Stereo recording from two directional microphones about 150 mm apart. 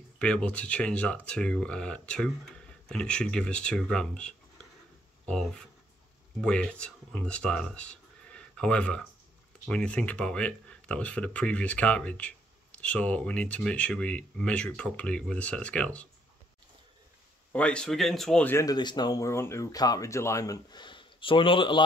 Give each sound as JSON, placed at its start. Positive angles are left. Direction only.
{"t": 0.2, "sound": "speech", "side_deg": 10}
{"t": 17.5, "sound": "speech", "side_deg": 10}